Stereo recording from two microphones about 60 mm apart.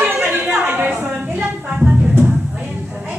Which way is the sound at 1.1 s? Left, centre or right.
Right.